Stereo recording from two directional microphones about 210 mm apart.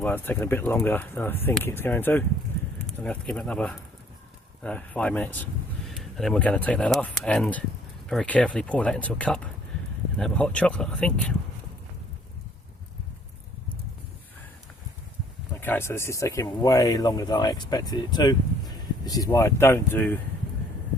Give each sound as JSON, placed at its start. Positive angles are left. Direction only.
{"t": 0.0, "sound": "speech", "side_deg": 10}
{"t": 15.6, "sound": "speech", "side_deg": 10}